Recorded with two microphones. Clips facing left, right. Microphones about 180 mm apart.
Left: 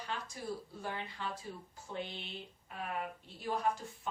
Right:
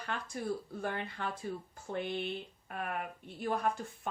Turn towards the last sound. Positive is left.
turn(degrees=-55)  # may be behind; listen again after turning